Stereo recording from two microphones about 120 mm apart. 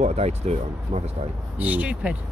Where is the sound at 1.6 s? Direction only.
10° right (ahead or behind).